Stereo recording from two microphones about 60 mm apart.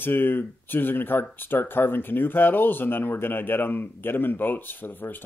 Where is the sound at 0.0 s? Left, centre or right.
Left.